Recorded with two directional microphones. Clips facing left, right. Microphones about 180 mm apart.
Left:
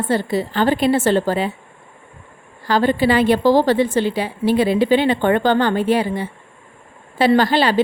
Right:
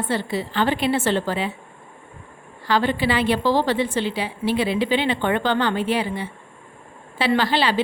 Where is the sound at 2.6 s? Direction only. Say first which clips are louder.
Left 5 dB; 40° left (ahead or behind).